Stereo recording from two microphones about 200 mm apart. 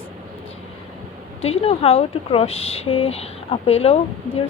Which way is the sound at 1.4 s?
30° left (ahead or behind).